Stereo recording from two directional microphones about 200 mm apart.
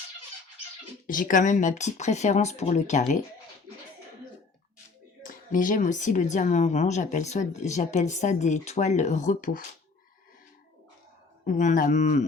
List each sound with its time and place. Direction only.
1.0 s speech: 40° left (ahead or behind)
5.3 s speech: 40° left (ahead or behind)
11.4 s speech: 40° left (ahead or behind)